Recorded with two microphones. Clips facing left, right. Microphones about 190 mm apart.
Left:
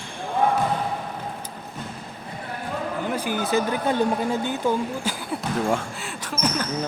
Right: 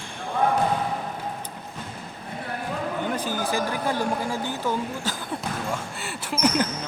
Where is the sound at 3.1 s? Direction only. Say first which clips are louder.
Left 2 dB; 10° left (ahead or behind).